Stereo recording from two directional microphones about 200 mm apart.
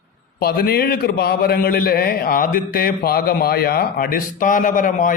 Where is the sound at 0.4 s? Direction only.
50° left (ahead or behind).